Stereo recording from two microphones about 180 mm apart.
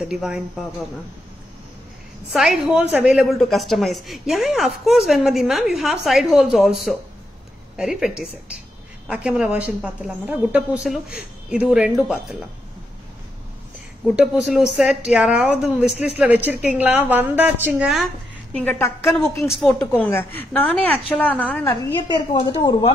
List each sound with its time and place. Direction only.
0.1 s a woman's voice: 5° right (ahead or behind)
2.3 s a woman's voice: centre (ahead or behind)
14.0 s a woman's voice: 5° right (ahead or behind)
22.3 s a woman's voice: 25° left (ahead or behind)